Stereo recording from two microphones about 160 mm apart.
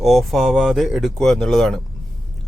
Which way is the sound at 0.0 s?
Centre (ahead or behind).